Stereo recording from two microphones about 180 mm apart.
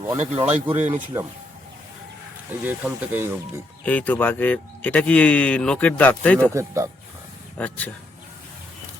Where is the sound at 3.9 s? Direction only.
10° left (ahead or behind).